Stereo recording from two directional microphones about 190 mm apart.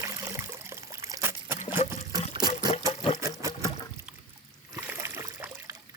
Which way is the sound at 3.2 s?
15° right (ahead or behind).